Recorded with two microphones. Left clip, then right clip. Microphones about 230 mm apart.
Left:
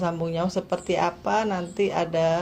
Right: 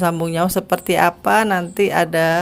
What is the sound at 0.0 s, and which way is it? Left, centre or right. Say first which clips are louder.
A woman's voice: right 8 dB; right.